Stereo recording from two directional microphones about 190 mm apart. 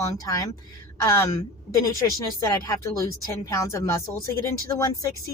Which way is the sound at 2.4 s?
15° left (ahead or behind).